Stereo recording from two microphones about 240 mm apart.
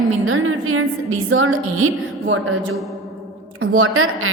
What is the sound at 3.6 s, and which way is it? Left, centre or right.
Speech, right.